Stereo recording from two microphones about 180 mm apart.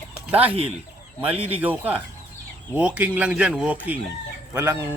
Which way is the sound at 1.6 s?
10° right (ahead or behind).